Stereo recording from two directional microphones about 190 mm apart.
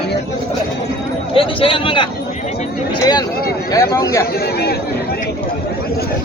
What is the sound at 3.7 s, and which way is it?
Speech, 20° left (ahead or behind).